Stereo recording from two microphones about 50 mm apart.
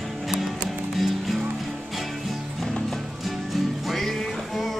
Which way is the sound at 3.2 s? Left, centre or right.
Centre.